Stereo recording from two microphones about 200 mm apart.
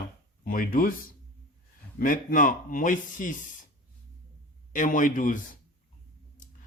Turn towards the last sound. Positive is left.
turn(degrees=40)  # may be behind; listen again after turning